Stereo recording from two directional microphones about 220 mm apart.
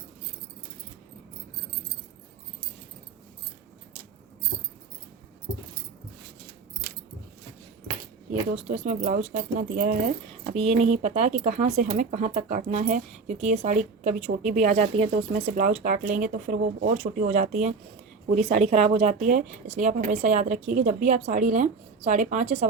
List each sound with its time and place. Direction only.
8.3 s speech: 30° right (ahead or behind)
10.4 s speech: 30° right (ahead or behind)